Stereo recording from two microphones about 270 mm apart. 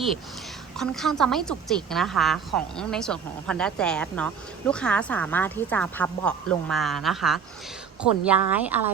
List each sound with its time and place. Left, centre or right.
0.8 s a woman's voice: centre